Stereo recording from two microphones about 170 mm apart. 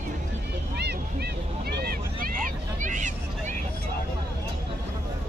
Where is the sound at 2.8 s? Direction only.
45° right (ahead or behind).